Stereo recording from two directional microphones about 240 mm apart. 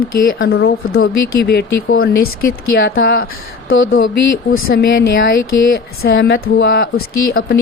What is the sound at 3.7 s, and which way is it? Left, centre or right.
Speech, left.